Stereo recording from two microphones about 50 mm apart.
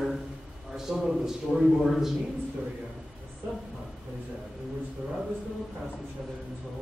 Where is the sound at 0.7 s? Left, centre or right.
Centre.